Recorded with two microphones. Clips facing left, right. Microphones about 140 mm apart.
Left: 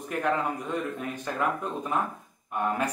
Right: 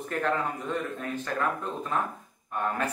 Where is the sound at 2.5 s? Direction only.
15° left (ahead or behind).